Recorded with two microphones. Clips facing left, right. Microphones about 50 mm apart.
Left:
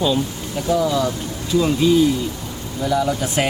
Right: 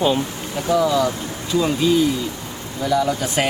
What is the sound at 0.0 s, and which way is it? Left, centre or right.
Speech, right.